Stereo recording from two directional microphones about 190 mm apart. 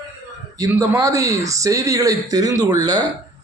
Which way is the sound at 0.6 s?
15° right (ahead or behind).